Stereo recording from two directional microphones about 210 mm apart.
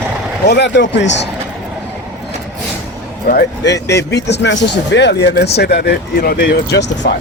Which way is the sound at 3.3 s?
55° left (ahead or behind).